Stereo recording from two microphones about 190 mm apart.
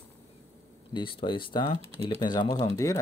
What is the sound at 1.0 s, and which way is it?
Speech, 25° left (ahead or behind).